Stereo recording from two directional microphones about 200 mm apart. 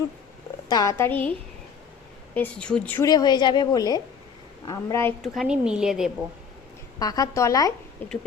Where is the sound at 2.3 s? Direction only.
5° left (ahead or behind).